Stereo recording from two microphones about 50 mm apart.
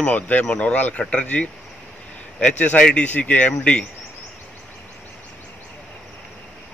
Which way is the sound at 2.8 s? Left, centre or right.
Centre.